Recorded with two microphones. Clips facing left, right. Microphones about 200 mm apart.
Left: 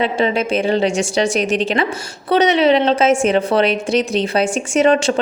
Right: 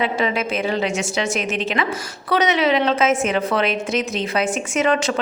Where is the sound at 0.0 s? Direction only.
30° left (ahead or behind).